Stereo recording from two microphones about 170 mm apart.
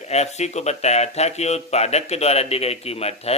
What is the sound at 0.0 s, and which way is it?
Speech, 40° left (ahead or behind).